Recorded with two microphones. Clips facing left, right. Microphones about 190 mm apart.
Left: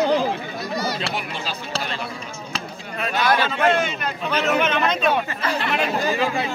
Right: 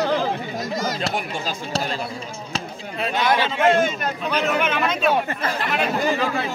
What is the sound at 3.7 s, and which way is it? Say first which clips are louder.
Speech: right 3 dB; 45° right (ahead or behind).